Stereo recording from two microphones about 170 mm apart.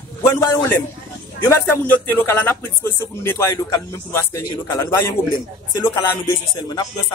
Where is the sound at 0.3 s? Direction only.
15° left (ahead or behind).